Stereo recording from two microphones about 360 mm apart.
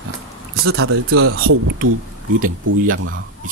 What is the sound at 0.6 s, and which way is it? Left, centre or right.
Speech, right.